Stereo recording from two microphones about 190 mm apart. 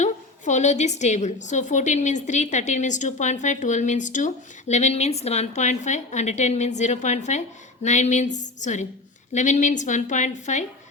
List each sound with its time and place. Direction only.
0.0 s a woman's voice: 40° left (ahead or behind)